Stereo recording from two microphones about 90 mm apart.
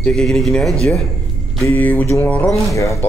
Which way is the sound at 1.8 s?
20° left (ahead or behind).